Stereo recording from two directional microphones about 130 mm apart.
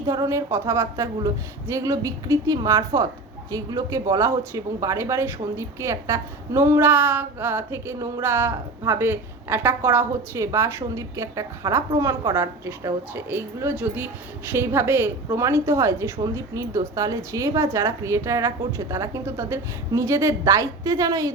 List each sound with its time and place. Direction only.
0.1 s speech: 25° right (ahead or behind)